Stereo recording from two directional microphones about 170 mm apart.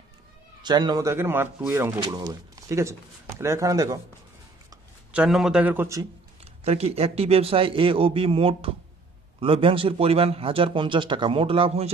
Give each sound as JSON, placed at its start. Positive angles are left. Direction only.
{"t": 0.6, "sound": "speech", "side_deg": -25}
{"t": 5.1, "sound": "speech", "side_deg": -5}
{"t": 6.6, "sound": "a man's voice", "side_deg": -40}